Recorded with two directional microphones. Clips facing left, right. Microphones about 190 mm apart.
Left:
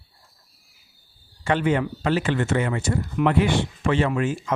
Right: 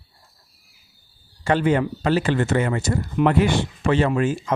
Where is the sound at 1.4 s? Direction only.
35° right (ahead or behind).